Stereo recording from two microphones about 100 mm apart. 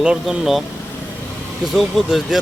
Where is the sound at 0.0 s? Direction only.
5° right (ahead or behind).